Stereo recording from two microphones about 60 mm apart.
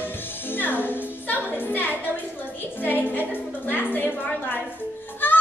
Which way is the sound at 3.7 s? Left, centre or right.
Left.